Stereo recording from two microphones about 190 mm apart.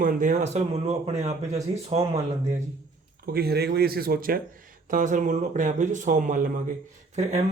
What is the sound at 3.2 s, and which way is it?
Speech, 55° right (ahead or behind).